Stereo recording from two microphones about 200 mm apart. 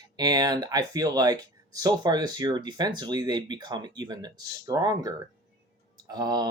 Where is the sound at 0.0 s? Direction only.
20° right (ahead or behind).